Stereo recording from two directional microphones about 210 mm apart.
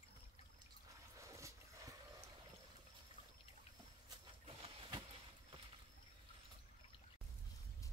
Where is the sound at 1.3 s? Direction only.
15° right (ahead or behind).